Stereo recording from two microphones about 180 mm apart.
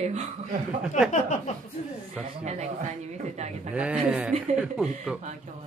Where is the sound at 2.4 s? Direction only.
40° right (ahead or behind).